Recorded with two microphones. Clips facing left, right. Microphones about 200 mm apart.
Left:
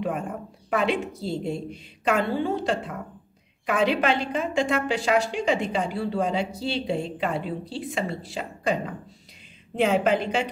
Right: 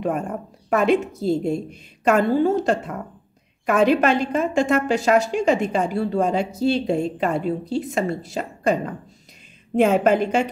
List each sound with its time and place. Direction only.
0.0 s a woman's voice: 45° right (ahead or behind)